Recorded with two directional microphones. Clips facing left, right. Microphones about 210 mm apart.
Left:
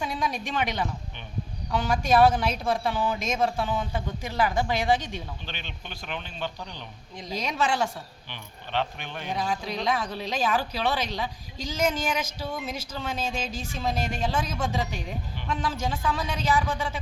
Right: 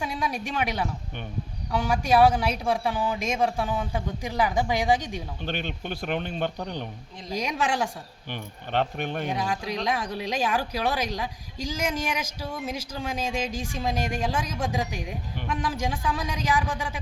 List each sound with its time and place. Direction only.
0.0 s a woman's voice: 10° right (ahead or behind)
5.4 s speech: 50° right (ahead or behind)
7.3 s a woman's voice: 15° right (ahead or behind)
8.3 s speech: 50° right (ahead or behind)
9.3 s a woman's voice: 10° right (ahead or behind)